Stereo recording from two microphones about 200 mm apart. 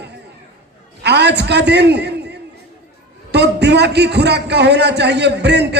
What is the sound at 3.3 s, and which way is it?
A man's voice, 55° right (ahead or behind).